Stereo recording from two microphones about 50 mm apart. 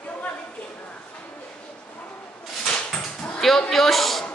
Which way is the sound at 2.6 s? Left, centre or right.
Left.